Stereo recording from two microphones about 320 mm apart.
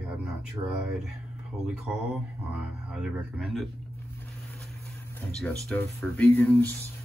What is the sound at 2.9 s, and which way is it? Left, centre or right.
Speech, centre.